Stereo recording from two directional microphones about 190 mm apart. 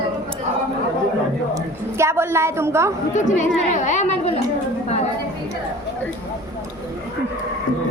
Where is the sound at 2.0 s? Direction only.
15° right (ahead or behind).